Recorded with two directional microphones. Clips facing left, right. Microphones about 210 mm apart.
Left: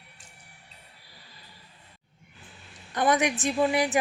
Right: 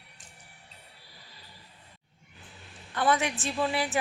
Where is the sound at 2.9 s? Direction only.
15° left (ahead or behind).